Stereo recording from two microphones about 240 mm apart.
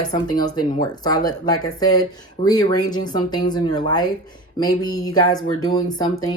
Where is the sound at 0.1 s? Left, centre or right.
Centre.